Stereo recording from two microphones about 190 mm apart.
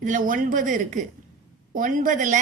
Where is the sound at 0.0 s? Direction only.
45° right (ahead or behind).